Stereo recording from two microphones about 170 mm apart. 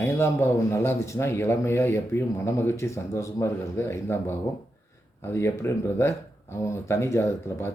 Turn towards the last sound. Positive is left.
turn(degrees=15)  # may be behind; listen again after turning